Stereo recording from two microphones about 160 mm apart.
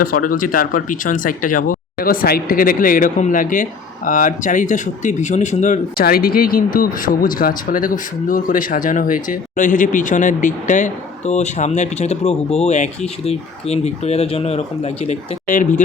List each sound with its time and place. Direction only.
0.0 s speech: 60° left (ahead or behind)